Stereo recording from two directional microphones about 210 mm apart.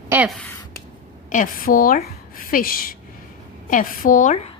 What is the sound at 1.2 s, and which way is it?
A woman's voice, 40° left (ahead or behind).